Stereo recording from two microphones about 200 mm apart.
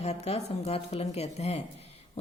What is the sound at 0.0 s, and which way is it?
A woman's voice, 30° left (ahead or behind).